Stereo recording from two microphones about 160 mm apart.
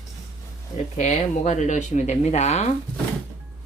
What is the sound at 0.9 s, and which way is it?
Speech, 45° left (ahead or behind).